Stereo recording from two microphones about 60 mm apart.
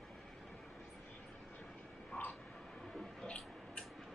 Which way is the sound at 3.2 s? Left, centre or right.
Centre.